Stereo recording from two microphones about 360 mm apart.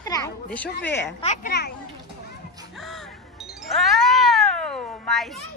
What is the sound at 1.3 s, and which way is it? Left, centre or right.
Speech, left.